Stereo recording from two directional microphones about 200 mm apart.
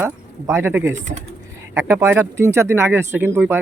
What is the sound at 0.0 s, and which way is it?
Speech, 10° right (ahead or behind).